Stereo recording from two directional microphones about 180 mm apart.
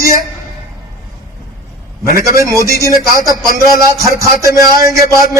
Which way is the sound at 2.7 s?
15° right (ahead or behind).